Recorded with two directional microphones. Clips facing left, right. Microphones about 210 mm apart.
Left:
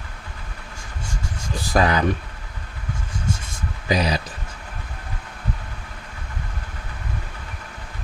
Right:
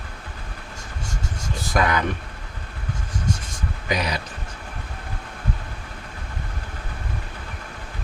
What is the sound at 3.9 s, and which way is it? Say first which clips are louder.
Speech: left 4 dB; 30° left (ahead or behind).